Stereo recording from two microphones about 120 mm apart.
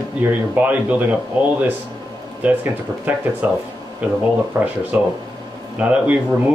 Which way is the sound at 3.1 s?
15° right (ahead or behind).